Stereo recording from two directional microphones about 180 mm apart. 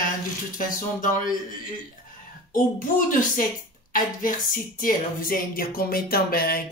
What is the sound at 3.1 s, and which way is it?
Speech, 50° left (ahead or behind).